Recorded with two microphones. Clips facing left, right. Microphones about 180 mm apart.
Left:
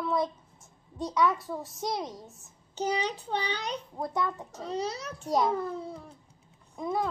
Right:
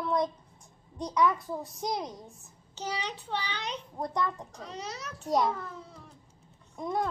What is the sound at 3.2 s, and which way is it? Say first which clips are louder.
Speech: left 3 dB; 35° left (ahead or behind).